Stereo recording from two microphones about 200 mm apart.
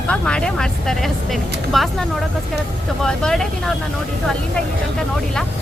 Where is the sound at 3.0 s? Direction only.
5° left (ahead or behind).